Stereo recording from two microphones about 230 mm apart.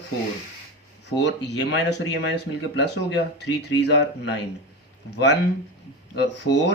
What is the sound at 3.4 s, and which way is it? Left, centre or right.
Speech, left.